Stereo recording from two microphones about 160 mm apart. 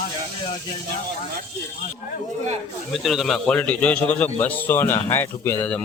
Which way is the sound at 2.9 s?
Centre (ahead or behind).